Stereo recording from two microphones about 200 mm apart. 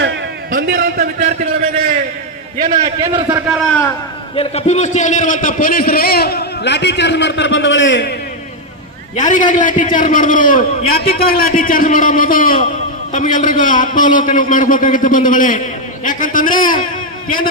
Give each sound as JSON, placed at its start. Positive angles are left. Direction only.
{"t": 0.5, "sound": "a man's voice", "side_deg": -50}
{"t": 2.6, "sound": "a man's voice", "side_deg": -40}
{"t": 3.3, "sound": "a man's voice", "side_deg": -5}
{"t": 4.4, "sound": "a man's voice", "side_deg": 30}
{"t": 9.1, "sound": "a man's voice", "side_deg": 40}